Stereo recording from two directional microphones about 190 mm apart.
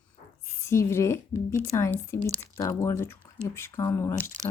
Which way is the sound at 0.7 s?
15° left (ahead or behind).